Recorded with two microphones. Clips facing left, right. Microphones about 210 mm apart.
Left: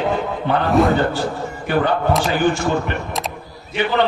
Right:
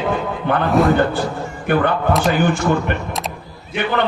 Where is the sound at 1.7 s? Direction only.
55° right (ahead or behind).